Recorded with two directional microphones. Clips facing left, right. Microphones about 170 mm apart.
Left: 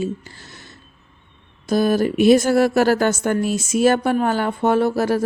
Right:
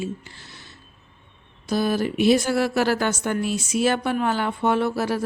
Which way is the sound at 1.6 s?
45° left (ahead or behind).